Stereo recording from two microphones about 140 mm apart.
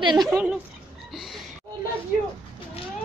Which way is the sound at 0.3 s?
10° right (ahead or behind).